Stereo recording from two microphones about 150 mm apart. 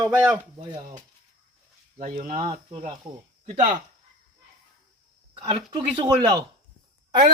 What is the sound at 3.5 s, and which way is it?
Speech, 55° right (ahead or behind).